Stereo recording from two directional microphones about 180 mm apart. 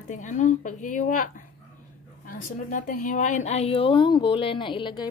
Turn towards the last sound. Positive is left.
turn(degrees=25)  # may be behind; listen again after turning